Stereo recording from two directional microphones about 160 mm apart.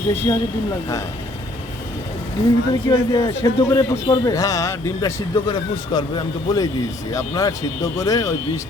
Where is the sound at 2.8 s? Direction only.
20° left (ahead or behind).